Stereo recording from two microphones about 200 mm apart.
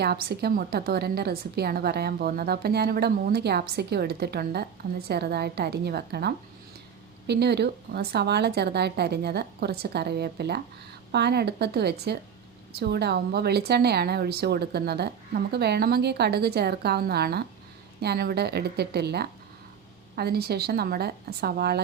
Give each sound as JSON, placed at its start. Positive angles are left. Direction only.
{"t": 0.0, "sound": "a woman's voice", "side_deg": -50}